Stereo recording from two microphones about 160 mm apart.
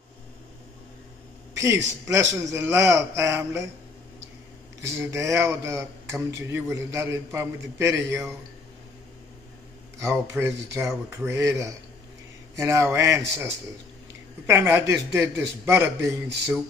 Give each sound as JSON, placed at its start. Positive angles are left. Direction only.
{"t": 1.5, "sound": "speech", "side_deg": -20}
{"t": 4.8, "sound": "speech", "side_deg": -15}
{"t": 9.9, "sound": "speech", "side_deg": -15}